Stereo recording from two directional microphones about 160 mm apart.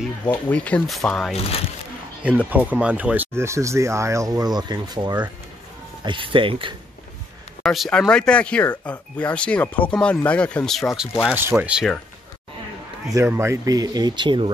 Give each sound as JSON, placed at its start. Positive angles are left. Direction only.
{"t": 0.5, "sound": "speech", "side_deg": 10}
{"t": 2.2, "sound": "speech", "side_deg": -10}
{"t": 7.6, "sound": "speech", "side_deg": 0}
{"t": 13.1, "sound": "speech", "side_deg": -15}